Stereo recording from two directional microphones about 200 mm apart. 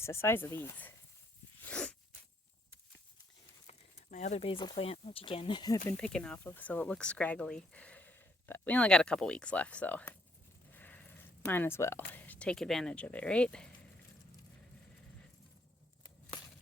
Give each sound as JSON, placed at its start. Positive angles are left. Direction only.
{"t": 0.0, "sound": "speech", "side_deg": 15}
{"t": 1.6, "sound": "sneeze", "side_deg": 5}
{"t": 3.7, "sound": "speech", "side_deg": 35}
{"t": 6.0, "sound": "speech", "side_deg": 5}
{"t": 10.7, "sound": "a sound", "side_deg": 10}
{"t": 11.4, "sound": "speech", "side_deg": 10}